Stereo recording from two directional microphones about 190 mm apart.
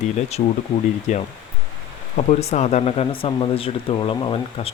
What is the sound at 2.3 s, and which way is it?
Speech, 35° left (ahead or behind).